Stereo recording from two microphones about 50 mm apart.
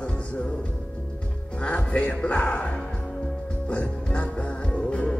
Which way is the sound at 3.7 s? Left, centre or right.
Left.